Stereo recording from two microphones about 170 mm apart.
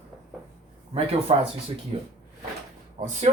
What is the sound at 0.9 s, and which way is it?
Speech, 35° right (ahead or behind).